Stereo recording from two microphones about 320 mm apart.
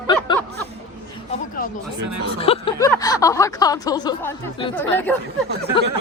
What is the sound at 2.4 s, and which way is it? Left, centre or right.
Speech, centre.